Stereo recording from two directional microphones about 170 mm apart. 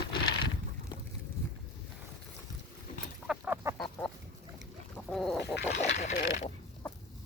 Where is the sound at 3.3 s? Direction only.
10° right (ahead or behind).